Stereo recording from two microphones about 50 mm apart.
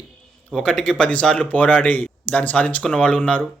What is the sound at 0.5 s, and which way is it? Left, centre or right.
A man's voice, centre.